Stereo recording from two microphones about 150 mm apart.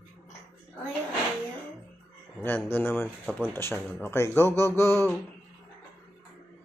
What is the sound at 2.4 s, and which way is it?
Speech, 15° left (ahead or behind).